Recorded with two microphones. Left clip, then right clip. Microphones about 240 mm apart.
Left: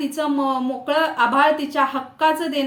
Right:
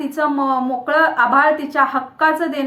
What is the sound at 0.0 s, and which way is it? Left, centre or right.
A woman's voice, centre.